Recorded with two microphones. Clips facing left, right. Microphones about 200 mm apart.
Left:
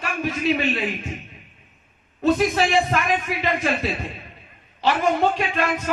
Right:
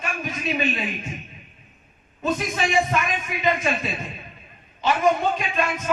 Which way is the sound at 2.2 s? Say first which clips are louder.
Left 6 dB; 65° left (ahead or behind).